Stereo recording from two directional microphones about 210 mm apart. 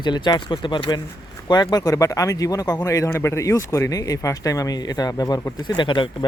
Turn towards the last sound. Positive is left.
turn(degrees=25)  # may be behind; listen again after turning